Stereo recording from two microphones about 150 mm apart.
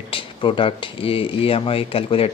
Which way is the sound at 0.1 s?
35° left (ahead or behind).